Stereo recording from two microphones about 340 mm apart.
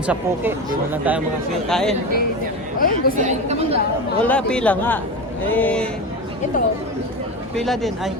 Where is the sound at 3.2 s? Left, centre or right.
Right.